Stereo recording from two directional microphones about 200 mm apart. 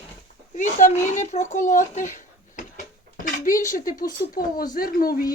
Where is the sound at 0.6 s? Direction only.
40° left (ahead or behind).